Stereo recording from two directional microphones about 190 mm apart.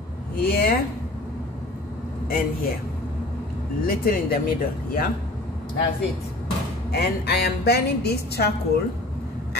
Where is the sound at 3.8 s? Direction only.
50° left (ahead or behind).